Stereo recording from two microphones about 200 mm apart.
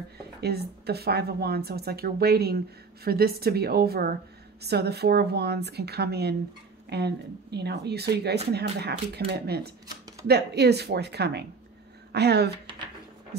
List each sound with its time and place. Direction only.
0.4 s a woman's voice: 55° right (ahead or behind)